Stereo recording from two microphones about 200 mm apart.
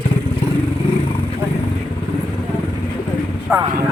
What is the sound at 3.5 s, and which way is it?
Vehicle, 5° right (ahead or behind).